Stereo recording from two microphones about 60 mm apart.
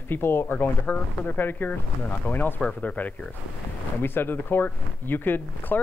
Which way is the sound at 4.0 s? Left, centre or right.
Left.